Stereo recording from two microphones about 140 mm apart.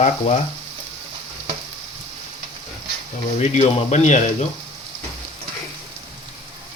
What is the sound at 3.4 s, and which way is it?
Speech, 55° left (ahead or behind).